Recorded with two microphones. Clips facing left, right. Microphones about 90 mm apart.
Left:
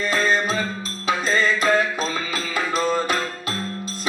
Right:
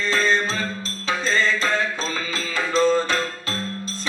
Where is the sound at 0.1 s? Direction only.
15° left (ahead or behind).